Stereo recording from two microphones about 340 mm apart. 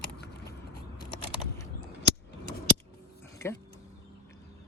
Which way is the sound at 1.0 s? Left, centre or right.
Centre.